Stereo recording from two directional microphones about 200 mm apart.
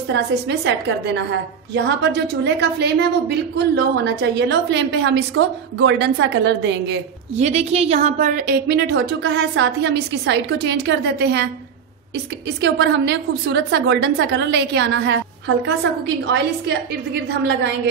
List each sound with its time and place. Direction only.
0.1 s a woman's voice: 60° right (ahead or behind)
7.3 s a woman's voice: 35° right (ahead or behind); by 11.4 s 60° right (ahead or behind)
12.6 s a woman's voice: 60° right (ahead or behind)